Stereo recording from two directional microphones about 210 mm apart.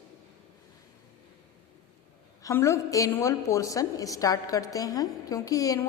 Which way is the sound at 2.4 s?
15° left (ahead or behind).